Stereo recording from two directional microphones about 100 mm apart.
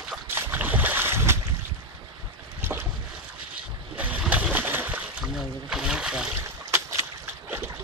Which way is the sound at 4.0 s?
15° right (ahead or behind).